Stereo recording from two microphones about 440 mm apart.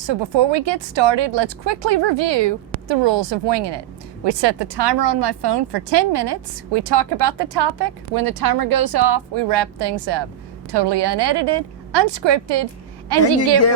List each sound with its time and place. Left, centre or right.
0.1 s speech: right
13.1 s speech: right